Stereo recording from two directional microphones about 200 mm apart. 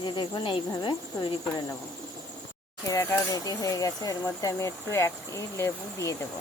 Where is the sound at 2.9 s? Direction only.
15° left (ahead or behind).